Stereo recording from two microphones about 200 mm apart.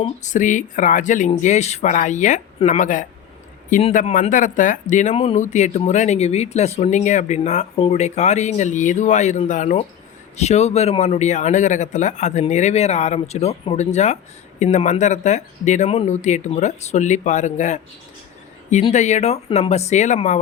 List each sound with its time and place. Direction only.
0.2 s speech: 40° left (ahead or behind)